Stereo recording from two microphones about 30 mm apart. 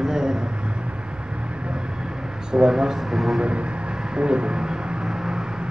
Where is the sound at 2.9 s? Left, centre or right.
Centre.